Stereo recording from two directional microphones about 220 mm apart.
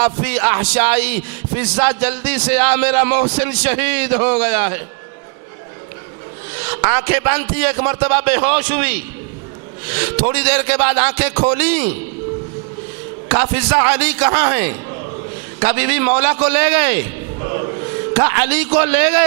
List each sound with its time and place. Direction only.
0.0 s speech: 10° right (ahead or behind)
6.8 s speech: 10° right (ahead or behind)
13.2 s speech: 10° right (ahead or behind)
17.4 s music: 20° right (ahead or behind)
18.1 s speech: 15° right (ahead or behind)